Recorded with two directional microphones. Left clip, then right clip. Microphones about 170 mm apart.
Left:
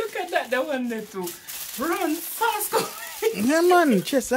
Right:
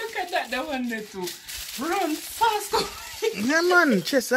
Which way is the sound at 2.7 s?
25° left (ahead or behind).